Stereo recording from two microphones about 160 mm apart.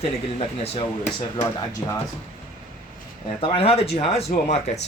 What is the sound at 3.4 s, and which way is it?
Speech, 35° left (ahead or behind).